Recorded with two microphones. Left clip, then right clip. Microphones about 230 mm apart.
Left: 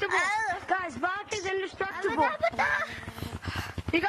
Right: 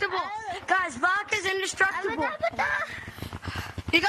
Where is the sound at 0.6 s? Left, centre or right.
Right.